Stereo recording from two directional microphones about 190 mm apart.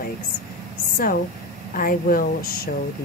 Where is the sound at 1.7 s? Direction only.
45° left (ahead or behind).